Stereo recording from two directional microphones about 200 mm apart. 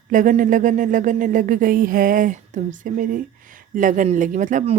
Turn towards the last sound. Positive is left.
turn(degrees=-35)  # may be behind; listen again after turning